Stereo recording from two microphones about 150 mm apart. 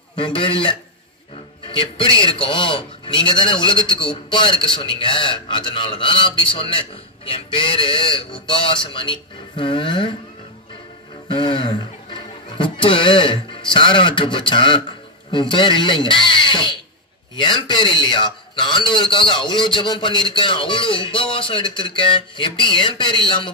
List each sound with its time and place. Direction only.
0.1 s a man's voice: 35° left (ahead or behind)
11.2 s a man's voice: 30° left (ahead or behind)